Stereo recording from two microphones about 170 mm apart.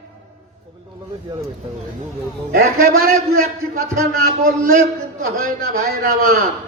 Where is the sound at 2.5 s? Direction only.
60° right (ahead or behind).